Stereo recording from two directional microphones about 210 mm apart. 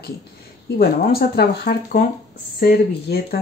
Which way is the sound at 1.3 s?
50° left (ahead or behind).